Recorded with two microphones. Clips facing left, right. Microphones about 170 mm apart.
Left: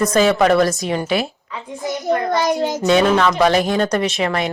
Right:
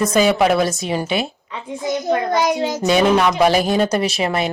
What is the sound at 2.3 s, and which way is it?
A woman's voice, centre (ahead or behind).